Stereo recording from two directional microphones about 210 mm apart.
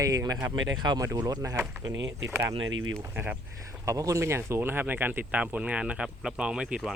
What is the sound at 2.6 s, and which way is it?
Speech, 70° right (ahead or behind).